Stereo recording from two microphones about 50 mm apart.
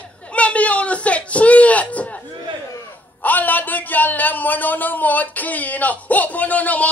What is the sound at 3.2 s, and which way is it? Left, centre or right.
Speech, left.